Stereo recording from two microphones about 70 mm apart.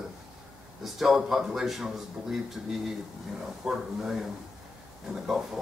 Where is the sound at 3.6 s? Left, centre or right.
Centre.